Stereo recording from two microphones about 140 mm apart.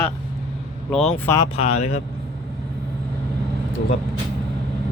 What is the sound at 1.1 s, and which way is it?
Speech, 15° left (ahead or behind).